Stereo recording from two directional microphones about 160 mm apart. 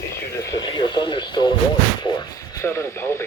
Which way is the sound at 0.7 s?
30° left (ahead or behind).